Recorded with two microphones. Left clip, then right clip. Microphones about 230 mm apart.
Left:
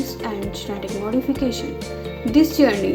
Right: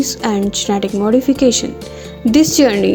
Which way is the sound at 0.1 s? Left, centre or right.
Right.